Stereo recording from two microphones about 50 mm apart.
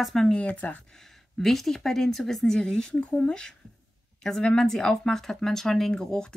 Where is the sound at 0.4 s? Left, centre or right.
Left.